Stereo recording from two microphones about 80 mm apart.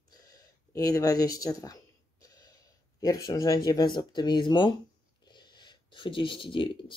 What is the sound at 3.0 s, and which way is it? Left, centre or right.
Speech, left.